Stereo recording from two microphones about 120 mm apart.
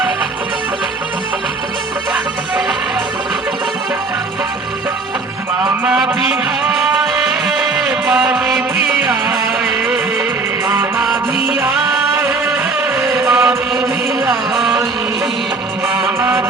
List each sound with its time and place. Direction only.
5.8 s a sound: 10° right (ahead or behind)
6.7 s music: 5° right (ahead or behind)
9.0 s music: 15° right (ahead or behind)
10.7 s music: 20° right (ahead or behind)
13.0 s chant: 5° right (ahead or behind)
14.3 s music: centre (ahead or behind)